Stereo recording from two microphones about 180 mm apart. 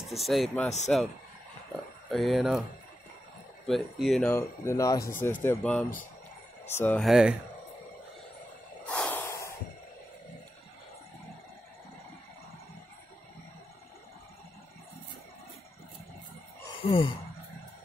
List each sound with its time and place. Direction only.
0.1 s speech: centre (ahead or behind)
3.6 s speech: centre (ahead or behind)
4.3 s speech: 15° left (ahead or behind)
7.1 s speech: 5° right (ahead or behind)
8.8 s snort: 5° left (ahead or behind)
16.8 s a sound: 30° left (ahead or behind)